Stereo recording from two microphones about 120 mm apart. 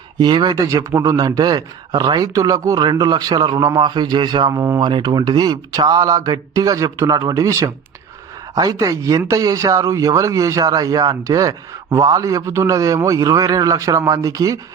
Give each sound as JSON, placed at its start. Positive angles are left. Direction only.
{"t": 0.2, "sound": "speech", "side_deg": -35}